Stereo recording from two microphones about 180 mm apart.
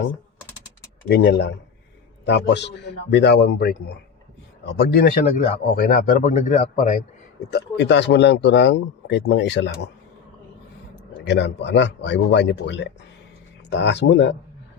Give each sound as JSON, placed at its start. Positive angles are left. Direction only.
{"t": 1.0, "sound": "speech", "side_deg": 70}
{"t": 7.5, "sound": "speech", "side_deg": 75}
{"t": 11.3, "sound": "speech", "side_deg": 75}